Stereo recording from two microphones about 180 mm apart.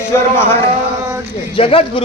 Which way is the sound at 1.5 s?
30° left (ahead or behind).